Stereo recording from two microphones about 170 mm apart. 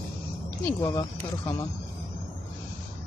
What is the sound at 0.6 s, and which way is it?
Speech, 15° left (ahead or behind).